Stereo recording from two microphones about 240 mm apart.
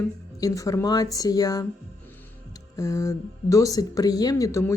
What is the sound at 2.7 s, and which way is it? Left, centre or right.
Speech, centre.